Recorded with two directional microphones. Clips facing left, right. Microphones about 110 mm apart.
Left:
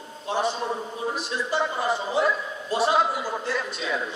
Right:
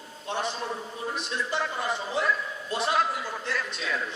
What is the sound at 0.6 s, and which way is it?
Speech, 25° left (ahead or behind).